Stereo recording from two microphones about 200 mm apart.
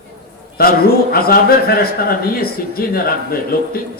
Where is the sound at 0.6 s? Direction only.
50° left (ahead or behind).